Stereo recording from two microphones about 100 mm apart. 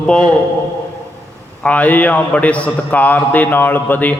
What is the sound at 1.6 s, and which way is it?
A man's voice, 15° left (ahead or behind).